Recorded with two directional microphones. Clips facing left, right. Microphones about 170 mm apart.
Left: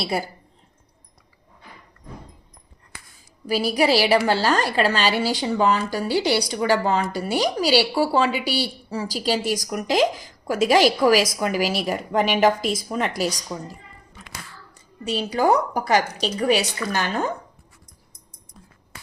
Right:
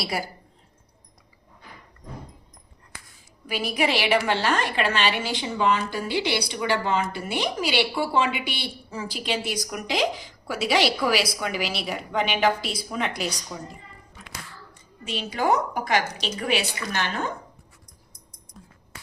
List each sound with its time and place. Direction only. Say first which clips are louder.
0.0 s a woman's voice: left 4 dB; 25° left (ahead or behind)
3.4 s a woman's voice: left 5 dB; 40° left (ahead or behind)
15.0 s a woman's voice: left 5 dB; 35° left (ahead or behind)